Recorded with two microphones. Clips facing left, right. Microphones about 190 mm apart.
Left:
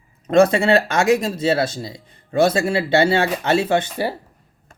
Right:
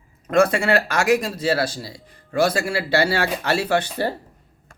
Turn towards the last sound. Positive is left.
turn(degrees=15)  # may be behind; listen again after turning